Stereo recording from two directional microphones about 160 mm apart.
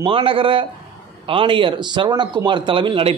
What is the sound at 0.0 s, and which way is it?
A man's voice, 35° right (ahead or behind).